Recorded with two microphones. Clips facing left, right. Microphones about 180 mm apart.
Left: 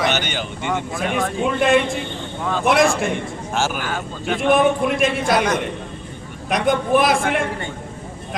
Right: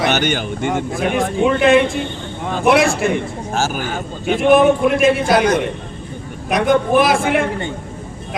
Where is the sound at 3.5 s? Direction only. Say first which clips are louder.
Right 2 dB; 40° right (ahead or behind).